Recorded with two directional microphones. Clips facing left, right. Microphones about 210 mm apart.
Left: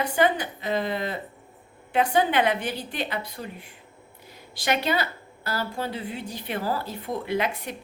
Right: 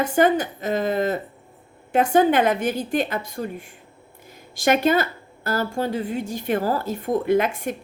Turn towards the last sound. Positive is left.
turn(degrees=-50)  # may be behind; listen again after turning